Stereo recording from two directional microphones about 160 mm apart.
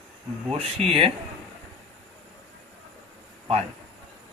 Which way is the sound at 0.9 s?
35° right (ahead or behind).